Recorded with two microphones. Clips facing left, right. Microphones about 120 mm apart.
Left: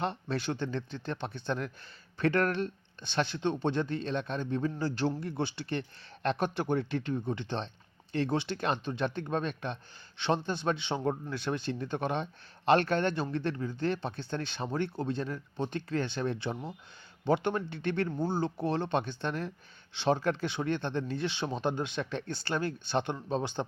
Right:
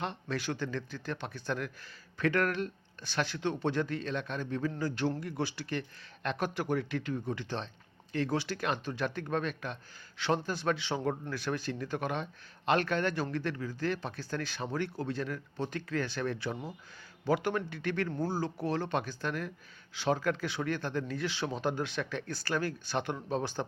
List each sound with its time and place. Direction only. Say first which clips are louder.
0.0 s speech: left 3 dB; 30° left (ahead or behind)